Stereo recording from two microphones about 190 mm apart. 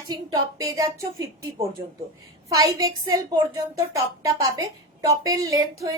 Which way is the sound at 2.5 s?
20° right (ahead or behind).